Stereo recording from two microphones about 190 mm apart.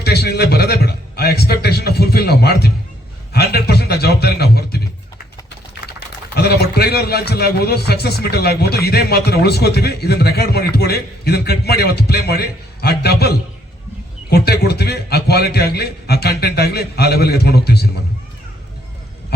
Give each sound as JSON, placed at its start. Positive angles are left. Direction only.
{"t": 0.0, "sound": "a man's voice", "side_deg": 60}
{"t": 6.3, "sound": "a man's voice", "side_deg": 60}